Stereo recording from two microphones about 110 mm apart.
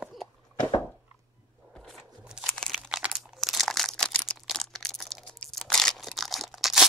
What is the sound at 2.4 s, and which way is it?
Crumpling, 5° left (ahead or behind).